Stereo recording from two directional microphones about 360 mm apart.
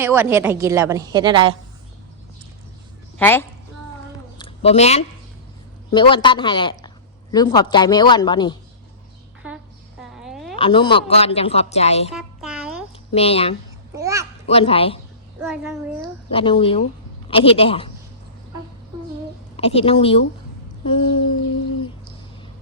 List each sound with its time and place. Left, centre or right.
0.0 s a woman's voice: centre
3.2 s a woman's voice: centre
4.4 s a sound: centre
5.9 s speech: centre
10.2 s a sound: centre
10.6 s speech: centre
12.1 s a sound: centre
13.1 s speech: centre
13.9 s a woman's voice: centre
14.4 s speech: centre
15.4 s a child's voice: centre
16.3 s speech: centre
19.5 s speech: centre